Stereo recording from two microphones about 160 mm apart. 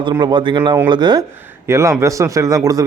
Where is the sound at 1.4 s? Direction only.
15° right (ahead or behind).